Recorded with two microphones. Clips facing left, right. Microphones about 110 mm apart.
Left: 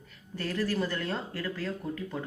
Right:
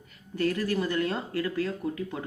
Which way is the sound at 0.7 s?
15° right (ahead or behind).